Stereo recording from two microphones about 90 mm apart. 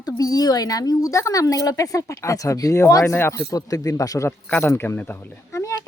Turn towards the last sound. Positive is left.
turn(degrees=35)  # may be behind; listen again after turning